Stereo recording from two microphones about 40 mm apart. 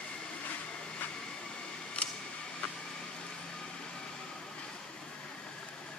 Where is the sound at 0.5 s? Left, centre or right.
Left.